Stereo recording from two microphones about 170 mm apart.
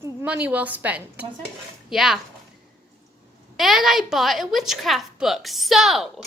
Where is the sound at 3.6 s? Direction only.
Centre (ahead or behind).